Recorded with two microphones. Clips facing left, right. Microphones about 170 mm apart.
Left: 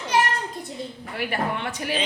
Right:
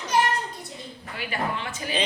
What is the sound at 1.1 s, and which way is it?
Speech, 65° left (ahead or behind).